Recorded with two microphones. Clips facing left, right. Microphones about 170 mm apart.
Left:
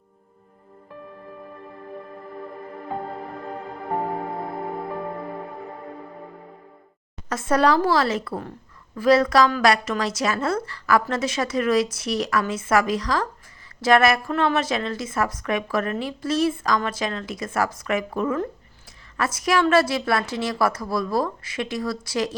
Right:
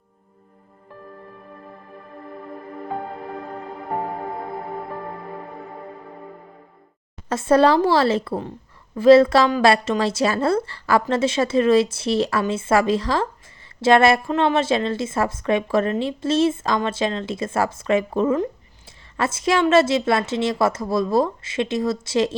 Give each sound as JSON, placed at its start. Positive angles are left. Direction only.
{"t": 7.3, "sound": "a woman's voice", "side_deg": -30}